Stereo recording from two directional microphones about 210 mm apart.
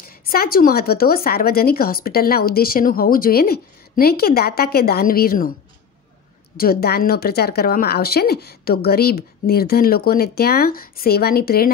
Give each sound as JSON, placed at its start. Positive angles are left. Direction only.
{"t": 0.2, "sound": "a woman's voice", "side_deg": 45}
{"t": 6.5, "sound": "a woman's voice", "side_deg": 45}